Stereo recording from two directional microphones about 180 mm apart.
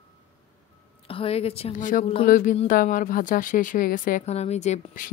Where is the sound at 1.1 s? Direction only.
30° left (ahead or behind).